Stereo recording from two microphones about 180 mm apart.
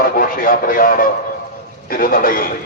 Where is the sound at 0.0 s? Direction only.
50° left (ahead or behind).